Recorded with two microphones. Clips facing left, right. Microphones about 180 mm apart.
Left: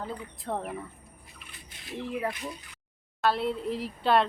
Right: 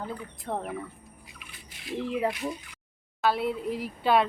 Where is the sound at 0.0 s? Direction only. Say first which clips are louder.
Even; centre (ahead or behind).